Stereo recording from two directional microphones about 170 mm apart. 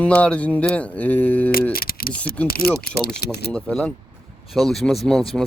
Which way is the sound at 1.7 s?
60° left (ahead or behind).